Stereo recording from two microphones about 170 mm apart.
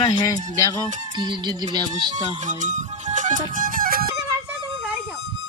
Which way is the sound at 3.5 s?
55° right (ahead or behind).